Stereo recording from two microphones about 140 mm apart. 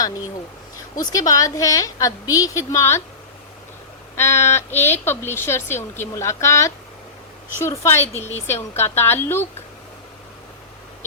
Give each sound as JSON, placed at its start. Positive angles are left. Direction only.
{"t": 1.1, "sound": "a woman's voice", "side_deg": 25}
{"t": 4.2, "sound": "a woman's voice", "side_deg": 20}